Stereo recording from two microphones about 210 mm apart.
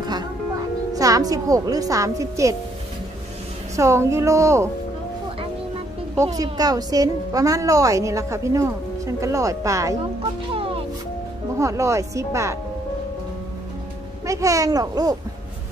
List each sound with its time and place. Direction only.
0.0 s music: 20° right (ahead or behind)
0.9 s a woman's voice: 15° right (ahead or behind)
3.7 s a woman's voice: 15° right (ahead or behind)
6.1 s a woman's voice: 15° right (ahead or behind)
10.5 s music: 25° right (ahead or behind)
11.5 s a woman's voice: 15° right (ahead or behind)
14.2 s a woman's voice: 15° right (ahead or behind)